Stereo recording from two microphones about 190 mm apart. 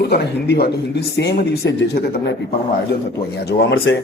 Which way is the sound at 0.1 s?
55° left (ahead or behind).